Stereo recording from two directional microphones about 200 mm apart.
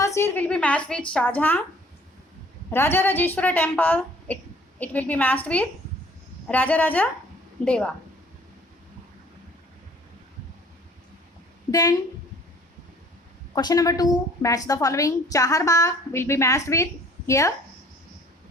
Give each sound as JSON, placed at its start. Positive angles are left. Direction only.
{"t": 0.0, "sound": "a woman's voice", "side_deg": 15}
{"t": 2.6, "sound": "a woman's voice", "side_deg": 10}
{"t": 11.7, "sound": "speech", "side_deg": 20}
{"t": 13.5, "sound": "a woman's voice", "side_deg": 20}